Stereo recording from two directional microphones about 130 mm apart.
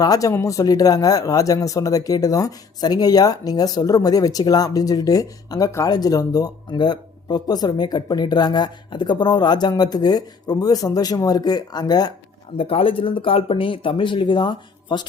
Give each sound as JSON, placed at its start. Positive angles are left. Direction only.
{"t": 0.0, "sound": "speech", "side_deg": 25}
{"t": 12.5, "sound": "speech", "side_deg": 45}